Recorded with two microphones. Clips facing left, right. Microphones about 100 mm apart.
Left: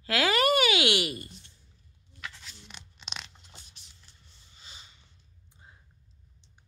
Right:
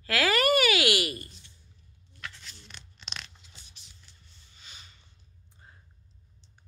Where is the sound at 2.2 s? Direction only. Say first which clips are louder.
Even; 5° left (ahead or behind).